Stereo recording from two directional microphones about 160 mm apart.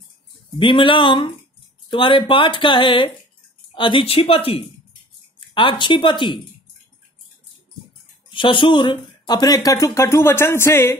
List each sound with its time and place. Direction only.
0.6 s speech: 30° left (ahead or behind)
8.3 s speech: 30° left (ahead or behind); by 11.0 s 15° left (ahead or behind)